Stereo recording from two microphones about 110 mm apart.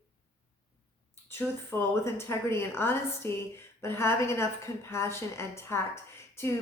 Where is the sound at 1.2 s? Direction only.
20° left (ahead or behind).